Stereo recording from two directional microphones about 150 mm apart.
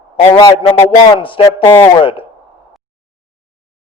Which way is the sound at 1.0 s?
30° left (ahead or behind).